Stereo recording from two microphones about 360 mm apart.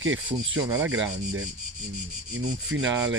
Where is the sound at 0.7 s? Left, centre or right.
Centre.